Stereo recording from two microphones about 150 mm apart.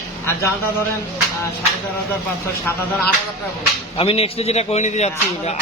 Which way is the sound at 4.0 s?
40° left (ahead or behind).